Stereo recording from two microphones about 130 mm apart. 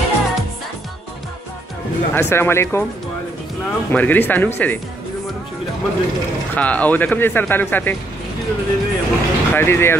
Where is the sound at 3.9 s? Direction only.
15° left (ahead or behind).